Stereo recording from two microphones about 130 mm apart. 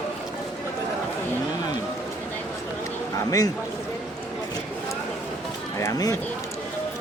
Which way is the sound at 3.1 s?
25° left (ahead or behind).